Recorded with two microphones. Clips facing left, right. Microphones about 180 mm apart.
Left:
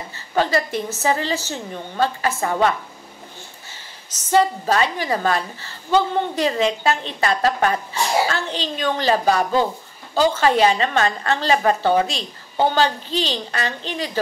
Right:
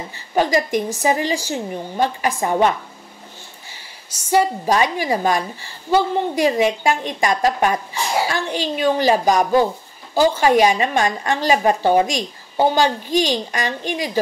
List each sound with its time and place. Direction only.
0.1 s a woman's voice: 15° right (ahead or behind)
3.7 s a woman's voice: 10° right (ahead or behind)